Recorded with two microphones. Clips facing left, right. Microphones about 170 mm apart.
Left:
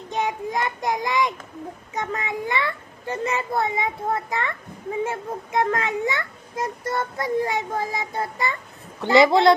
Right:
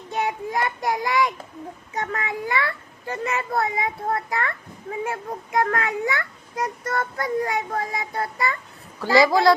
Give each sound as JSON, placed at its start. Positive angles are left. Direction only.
{"t": 0.1, "sound": "child singing", "side_deg": 20}
{"t": 2.0, "sound": "a child's voice", "side_deg": 20}